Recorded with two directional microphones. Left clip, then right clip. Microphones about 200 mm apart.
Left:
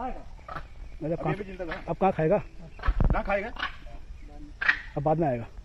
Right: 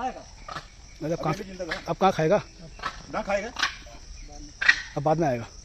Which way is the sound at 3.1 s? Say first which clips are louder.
Right 1 dB; 45° right (ahead or behind).